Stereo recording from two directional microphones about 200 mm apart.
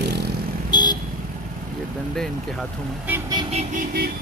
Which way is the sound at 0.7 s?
20° left (ahead or behind).